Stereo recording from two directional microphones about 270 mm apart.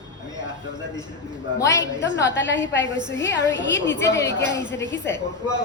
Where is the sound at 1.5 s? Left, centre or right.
Centre.